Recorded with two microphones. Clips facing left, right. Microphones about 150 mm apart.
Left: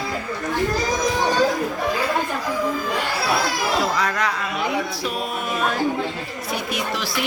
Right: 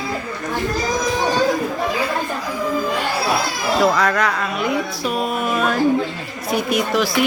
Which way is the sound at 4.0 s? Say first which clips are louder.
Right 4 dB; 60° right (ahead or behind).